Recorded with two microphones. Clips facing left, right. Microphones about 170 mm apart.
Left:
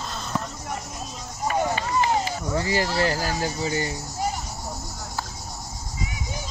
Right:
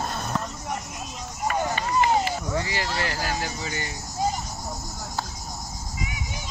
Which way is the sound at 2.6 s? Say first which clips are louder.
Left 5 dB; 40° left (ahead or behind).